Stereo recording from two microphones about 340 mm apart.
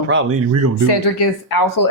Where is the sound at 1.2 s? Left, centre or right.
Left.